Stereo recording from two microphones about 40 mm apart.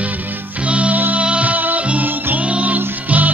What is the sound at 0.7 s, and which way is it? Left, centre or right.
Music, right.